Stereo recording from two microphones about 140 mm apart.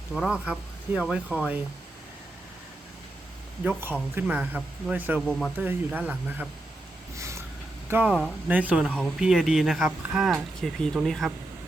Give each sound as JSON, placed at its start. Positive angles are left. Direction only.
{"t": 0.1, "sound": "speech", "side_deg": -5}
{"t": 3.6, "sound": "speech", "side_deg": -10}
{"t": 5.2, "sound": "speech", "side_deg": 5}
{"t": 5.5, "sound": "speech", "side_deg": -10}
{"t": 7.2, "sound": "a sound", "side_deg": -20}
{"t": 7.9, "sound": "speech", "side_deg": -15}